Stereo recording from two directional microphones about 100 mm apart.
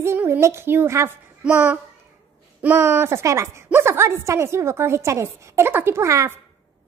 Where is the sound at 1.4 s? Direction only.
15° right (ahead or behind); by 6.3 s 30° right (ahead or behind).